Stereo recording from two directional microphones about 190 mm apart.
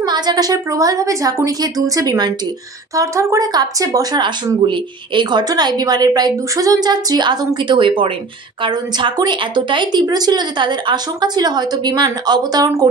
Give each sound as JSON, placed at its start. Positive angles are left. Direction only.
{"t": 0.0, "sound": "speech", "side_deg": -20}